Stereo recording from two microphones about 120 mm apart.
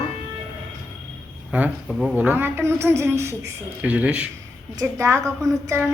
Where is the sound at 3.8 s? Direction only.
10° right (ahead or behind).